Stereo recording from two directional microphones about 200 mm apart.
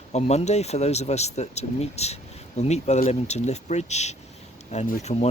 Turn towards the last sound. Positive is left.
turn(degrees=35)  # may be behind; listen again after turning